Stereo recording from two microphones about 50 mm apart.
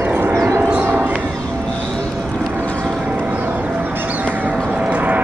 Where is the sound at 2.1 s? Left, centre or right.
Centre.